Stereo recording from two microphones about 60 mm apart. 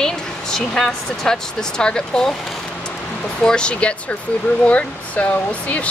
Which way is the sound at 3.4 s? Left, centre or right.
Centre.